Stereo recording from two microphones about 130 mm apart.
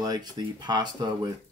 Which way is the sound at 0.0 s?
30° right (ahead or behind).